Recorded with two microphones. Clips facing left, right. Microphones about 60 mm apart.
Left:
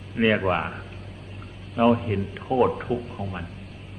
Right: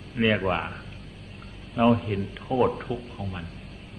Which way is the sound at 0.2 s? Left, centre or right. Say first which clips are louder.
Left 2 dB; centre.